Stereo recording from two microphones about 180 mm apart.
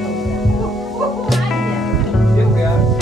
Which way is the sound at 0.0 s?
Centre (ahead or behind).